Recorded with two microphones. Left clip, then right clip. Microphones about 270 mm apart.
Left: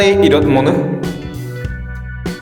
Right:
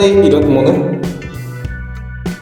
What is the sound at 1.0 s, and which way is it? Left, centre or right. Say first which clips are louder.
Music: even; centre.